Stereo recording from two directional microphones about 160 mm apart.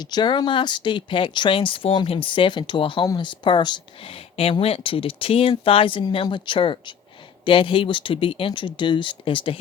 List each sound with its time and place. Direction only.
0.0 s speech: 25° left (ahead or behind)